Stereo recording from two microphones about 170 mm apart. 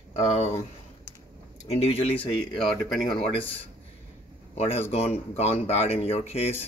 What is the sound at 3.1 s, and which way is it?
Speech, 30° left (ahead or behind).